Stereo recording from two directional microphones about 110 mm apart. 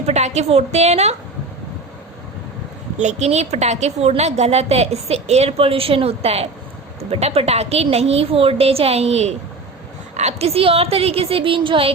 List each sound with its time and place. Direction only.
0.0 s a woman's voice: 90° right
3.0 s a woman's voice: 90° right; by 11.9 s 50° right (ahead or behind)